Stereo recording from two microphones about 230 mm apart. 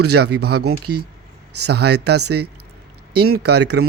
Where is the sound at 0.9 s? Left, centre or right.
Right.